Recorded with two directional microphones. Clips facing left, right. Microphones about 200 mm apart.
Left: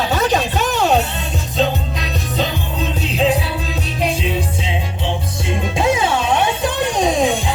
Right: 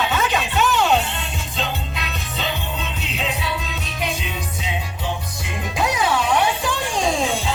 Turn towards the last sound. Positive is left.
turn(degrees=15)  # may be behind; listen again after turning